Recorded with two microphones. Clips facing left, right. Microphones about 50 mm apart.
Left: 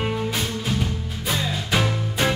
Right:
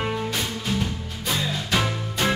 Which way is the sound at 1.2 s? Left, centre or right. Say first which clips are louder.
Left 1 dB; centre.